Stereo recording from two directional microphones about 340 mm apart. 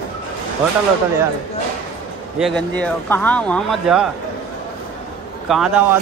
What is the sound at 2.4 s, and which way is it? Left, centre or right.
Speech, centre.